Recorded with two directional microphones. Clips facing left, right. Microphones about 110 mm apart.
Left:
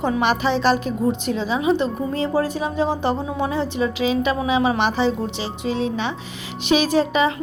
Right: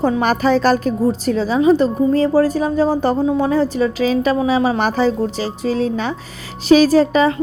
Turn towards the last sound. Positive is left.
turn(degrees=-40)  # may be behind; listen again after turning